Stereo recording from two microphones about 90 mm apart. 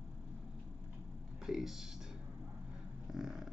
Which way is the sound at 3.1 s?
5° right (ahead or behind).